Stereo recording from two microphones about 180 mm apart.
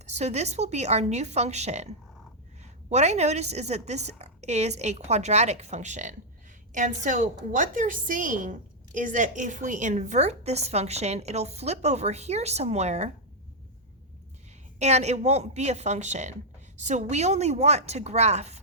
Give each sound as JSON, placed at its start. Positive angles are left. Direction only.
{"t": 0.0, "sound": "a woman's voice", "side_deg": -40}
{"t": 14.8, "sound": "a woman's voice", "side_deg": -40}